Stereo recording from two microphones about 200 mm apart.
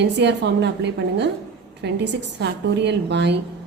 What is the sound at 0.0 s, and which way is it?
A woman's voice, 60° right (ahead or behind).